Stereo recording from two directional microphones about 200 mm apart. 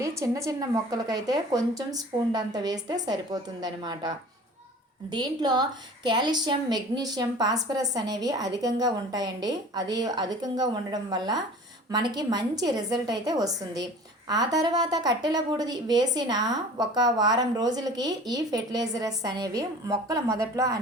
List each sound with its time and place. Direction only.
0.0 s a woman's voice: 15° right (ahead or behind)
5.1 s a woman's voice: 20° right (ahead or behind)